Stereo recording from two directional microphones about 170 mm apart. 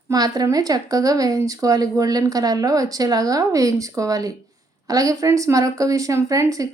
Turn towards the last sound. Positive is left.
turn(degrees=-20)  # may be behind; listen again after turning